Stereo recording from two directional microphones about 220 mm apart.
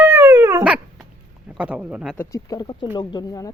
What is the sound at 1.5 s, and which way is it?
Speech, 5° right (ahead or behind).